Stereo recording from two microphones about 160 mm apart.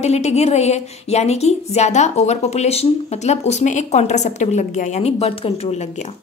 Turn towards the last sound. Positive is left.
turn(degrees=40)  # may be behind; listen again after turning